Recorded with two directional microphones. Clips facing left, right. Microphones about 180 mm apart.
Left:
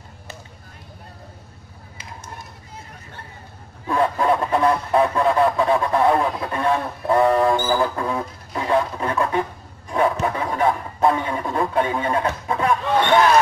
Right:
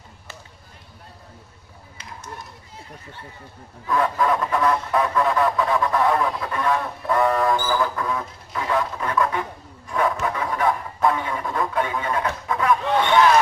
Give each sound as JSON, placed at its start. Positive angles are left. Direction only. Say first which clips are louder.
{"t": 3.8, "sound": "speech", "louder": "left 2 dB", "side_deg": 30}
{"t": 9.8, "sound": "rub", "louder": "left 3 dB", "side_deg": 30}